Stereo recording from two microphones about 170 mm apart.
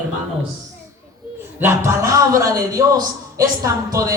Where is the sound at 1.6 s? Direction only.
15° right (ahead or behind).